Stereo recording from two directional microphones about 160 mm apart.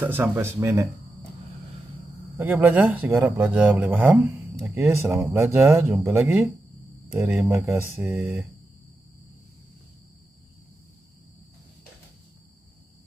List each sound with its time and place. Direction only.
0.0 s speech: 15° right (ahead or behind)
2.3 s speech: 10° right (ahead or behind)